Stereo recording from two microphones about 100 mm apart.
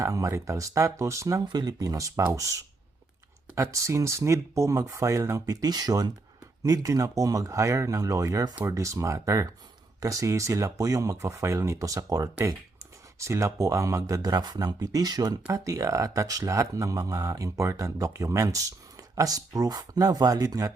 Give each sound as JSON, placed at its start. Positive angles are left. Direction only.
{"t": 0.0, "sound": "speech", "side_deg": -35}